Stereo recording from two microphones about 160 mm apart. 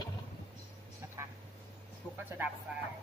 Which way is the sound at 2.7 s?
5° right (ahead or behind).